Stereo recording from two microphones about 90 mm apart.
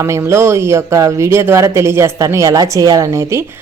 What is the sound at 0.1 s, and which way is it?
Speech, 30° right (ahead or behind).